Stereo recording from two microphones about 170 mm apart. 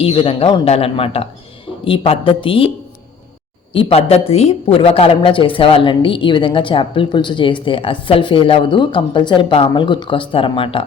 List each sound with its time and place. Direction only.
0.0 s a man's voice: 35° left (ahead or behind)